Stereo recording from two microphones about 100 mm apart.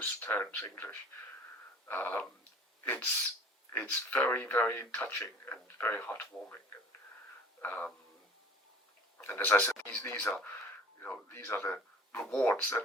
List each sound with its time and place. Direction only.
0.0 s speech: 20° left (ahead or behind)
7.6 s speech: 15° left (ahead or behind)
9.1 s a man's voice: 20° left (ahead or behind)